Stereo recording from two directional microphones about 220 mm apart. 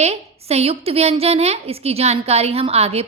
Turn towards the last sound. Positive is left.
turn(degrees=-25)  # may be behind; listen again after turning